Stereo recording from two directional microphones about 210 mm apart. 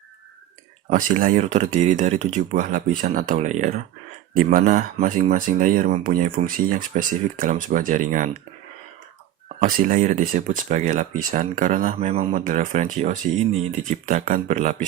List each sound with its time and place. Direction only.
0.9 s speech: 35° right (ahead or behind)
9.6 s speech: 40° right (ahead or behind)